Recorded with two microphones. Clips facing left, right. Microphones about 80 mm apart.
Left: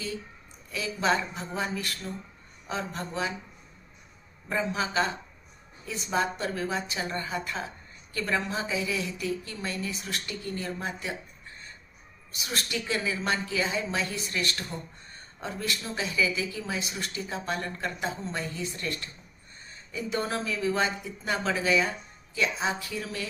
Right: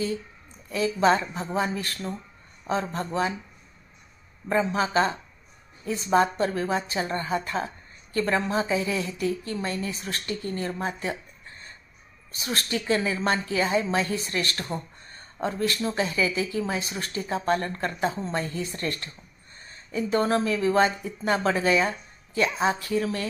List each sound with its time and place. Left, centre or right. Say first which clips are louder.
0.7 s a woman's voice: right 6 dB; right
4.4 s a woman's voice: right 5 dB; right
12.3 s a woman's voice: right 4 dB; right